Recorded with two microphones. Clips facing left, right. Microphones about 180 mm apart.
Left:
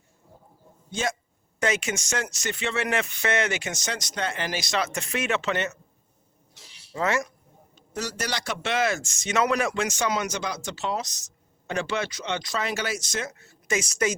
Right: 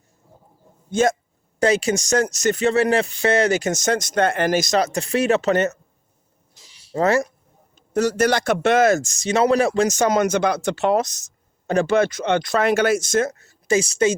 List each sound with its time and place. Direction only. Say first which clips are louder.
0.9 s speech: right 11 dB; 50° right (ahead or behind)
1.5 s speech: right 8 dB; 35° right (ahead or behind)
6.9 s speech: right 8 dB; 35° right (ahead or behind)
7.8 s speech: right 13 dB; 50° right (ahead or behind); by 14.2 s 30° right (ahead or behind)